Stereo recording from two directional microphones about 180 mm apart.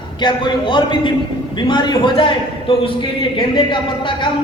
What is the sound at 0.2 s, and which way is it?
A man's voice, 25° left (ahead or behind).